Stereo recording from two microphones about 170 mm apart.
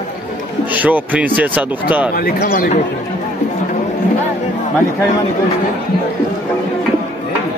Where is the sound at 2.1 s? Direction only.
60° left (ahead or behind).